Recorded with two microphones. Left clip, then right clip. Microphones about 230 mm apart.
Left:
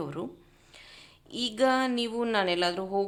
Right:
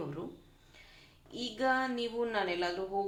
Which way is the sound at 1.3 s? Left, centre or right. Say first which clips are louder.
Left 6 dB; left.